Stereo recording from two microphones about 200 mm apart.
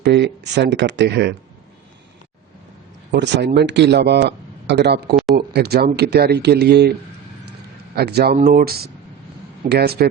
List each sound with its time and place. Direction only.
0.0 s a man's voice: 55° right (ahead or behind)
3.1 s a man's voice: 60° right (ahead or behind)
7.9 s speech: 50° right (ahead or behind)